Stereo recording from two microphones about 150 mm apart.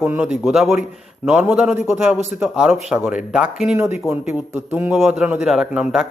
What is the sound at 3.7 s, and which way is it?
A man's voice, 20° right (ahead or behind).